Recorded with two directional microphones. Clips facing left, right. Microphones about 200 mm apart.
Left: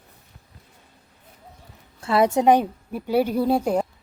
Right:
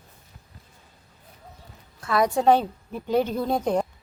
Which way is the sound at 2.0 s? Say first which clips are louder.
Left 3 dB; 30° left (ahead or behind).